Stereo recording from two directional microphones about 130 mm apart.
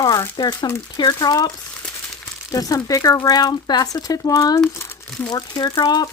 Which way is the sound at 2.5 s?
25° left (ahead or behind).